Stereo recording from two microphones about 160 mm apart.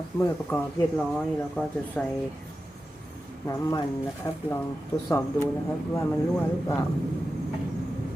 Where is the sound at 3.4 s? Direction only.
20° left (ahead or behind).